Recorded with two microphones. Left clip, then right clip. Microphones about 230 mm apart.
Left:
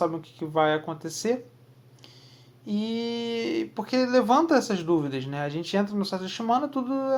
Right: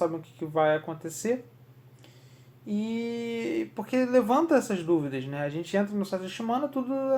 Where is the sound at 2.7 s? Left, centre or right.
Left.